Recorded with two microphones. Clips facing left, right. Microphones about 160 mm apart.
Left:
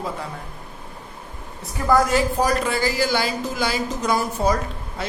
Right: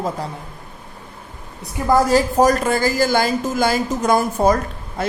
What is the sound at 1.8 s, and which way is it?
A woman's voice, 30° right (ahead or behind).